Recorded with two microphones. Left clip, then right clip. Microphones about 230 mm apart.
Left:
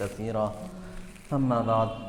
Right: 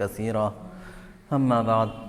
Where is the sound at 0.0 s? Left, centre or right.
Right.